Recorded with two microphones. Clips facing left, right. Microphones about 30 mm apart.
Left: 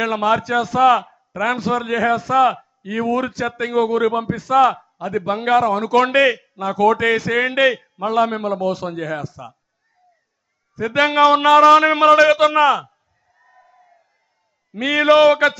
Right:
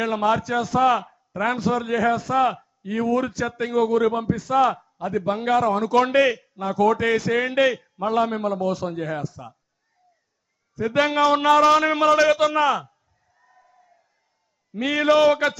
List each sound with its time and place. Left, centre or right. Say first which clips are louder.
0.0 s a man's voice: left 3 dB; left
0.6 s a man's voice: left 4 dB; left
1.4 s a man's voice: left 3 dB; left
1.6 s a man's voice: left 1 dB; left
4.4 s a man's voice: left 8 dB; left
4.6 s a man's voice: left 5 dB; left
5.1 s a man's voice: left 4 dB; left
6.6 s a man's voice: left 4 dB; left
8.0 s a man's voice: left 3 dB; left
9.3 s a man's voice: left 4 dB; left
10.8 s a man's voice: left 2 dB; left
11.2 s a man's voice: left 6 dB; left
13.3 s crowd: left 5 dB; left
14.8 s a man's voice: left 5 dB; left